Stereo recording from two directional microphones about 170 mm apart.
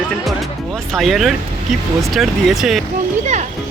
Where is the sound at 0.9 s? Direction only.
Centre (ahead or behind).